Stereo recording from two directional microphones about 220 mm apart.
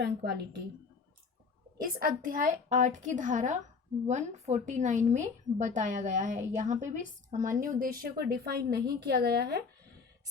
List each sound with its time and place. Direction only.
0.0 s a woman's voice: 50° right (ahead or behind)
1.8 s a woman's voice: 40° right (ahead or behind)